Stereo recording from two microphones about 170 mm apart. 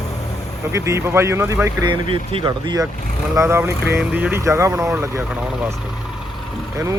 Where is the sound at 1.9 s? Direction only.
30° right (ahead or behind).